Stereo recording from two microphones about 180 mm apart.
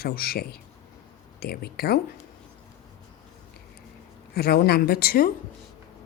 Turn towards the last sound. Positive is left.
turn(degrees=55)  # may be behind; listen again after turning